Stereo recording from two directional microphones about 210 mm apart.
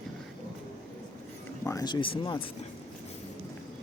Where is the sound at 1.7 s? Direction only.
20° left (ahead or behind).